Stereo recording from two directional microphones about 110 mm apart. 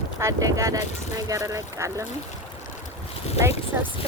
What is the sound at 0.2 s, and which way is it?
Speech, 30° right (ahead or behind).